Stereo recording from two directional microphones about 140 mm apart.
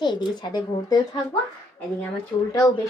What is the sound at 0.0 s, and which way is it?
Speech, 30° left (ahead or behind).